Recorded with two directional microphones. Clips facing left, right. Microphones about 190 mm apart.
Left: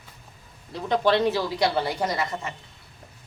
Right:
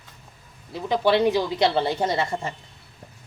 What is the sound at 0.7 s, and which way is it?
Speech, 5° right (ahead or behind).